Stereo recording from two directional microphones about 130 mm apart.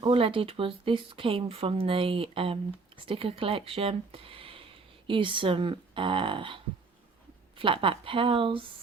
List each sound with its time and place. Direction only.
0.0 s speech: 40° right (ahead or behind)